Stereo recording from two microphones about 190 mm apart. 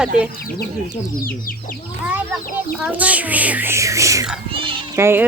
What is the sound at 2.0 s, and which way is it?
A child's voice, 10° right (ahead or behind).